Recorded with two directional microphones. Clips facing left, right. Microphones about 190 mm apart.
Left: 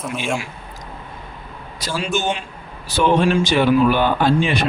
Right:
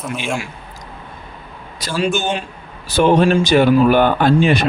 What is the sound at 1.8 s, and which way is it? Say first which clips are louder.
Speech: right 3 dB; 50° right (ahead or behind).